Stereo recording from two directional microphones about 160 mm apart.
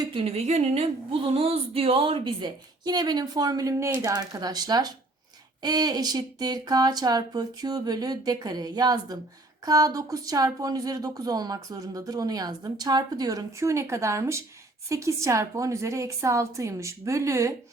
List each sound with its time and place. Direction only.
0.3 s speech: 40° right (ahead or behind); by 17.5 s 20° right (ahead or behind)